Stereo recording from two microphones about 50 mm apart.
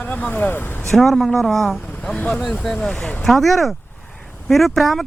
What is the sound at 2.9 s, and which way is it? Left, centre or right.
Speech, left.